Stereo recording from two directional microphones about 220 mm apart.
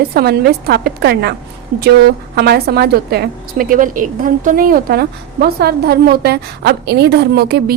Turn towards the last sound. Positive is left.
turn(degrees=-45)  # may be behind; listen again after turning